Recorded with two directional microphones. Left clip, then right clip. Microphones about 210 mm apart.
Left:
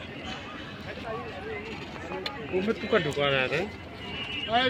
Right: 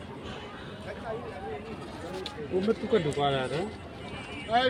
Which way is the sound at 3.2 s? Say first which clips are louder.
Left 3 dB; 25° right (ahead or behind).